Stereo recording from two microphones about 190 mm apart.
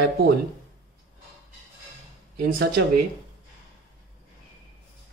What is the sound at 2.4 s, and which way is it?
Speech, 55° right (ahead or behind).